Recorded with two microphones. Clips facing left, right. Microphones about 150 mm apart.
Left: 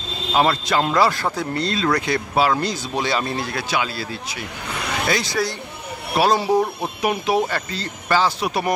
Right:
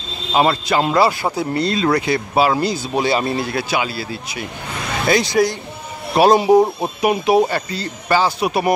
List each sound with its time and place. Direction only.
0.3 s speech: 5° right (ahead or behind)
5.1 s speech: 20° right (ahead or behind)